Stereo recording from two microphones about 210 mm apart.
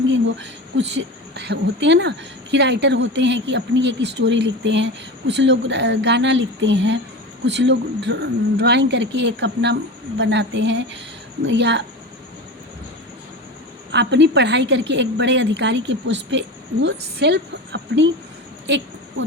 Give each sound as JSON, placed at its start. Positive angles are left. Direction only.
{"t": 0.8, "sound": "a woman's voice", "side_deg": -60}
{"t": 13.9, "sound": "a woman's voice", "side_deg": -55}